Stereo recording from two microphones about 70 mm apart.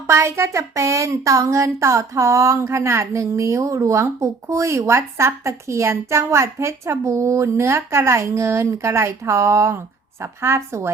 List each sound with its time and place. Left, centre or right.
0.1 s a woman's voice: right